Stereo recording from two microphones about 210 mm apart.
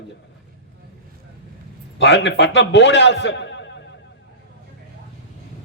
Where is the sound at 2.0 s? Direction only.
55° left (ahead or behind).